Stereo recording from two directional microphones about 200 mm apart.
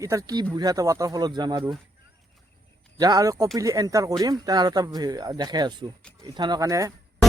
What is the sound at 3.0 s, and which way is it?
Speech, 20° right (ahead or behind).